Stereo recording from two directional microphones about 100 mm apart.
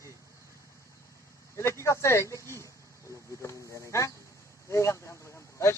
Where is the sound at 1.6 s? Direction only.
30° left (ahead or behind).